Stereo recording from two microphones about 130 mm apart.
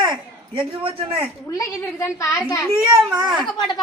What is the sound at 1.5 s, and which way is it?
A woman's voice, 25° left (ahead or behind).